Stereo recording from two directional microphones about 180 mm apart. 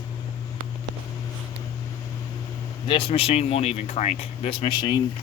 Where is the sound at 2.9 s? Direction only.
30° left (ahead or behind).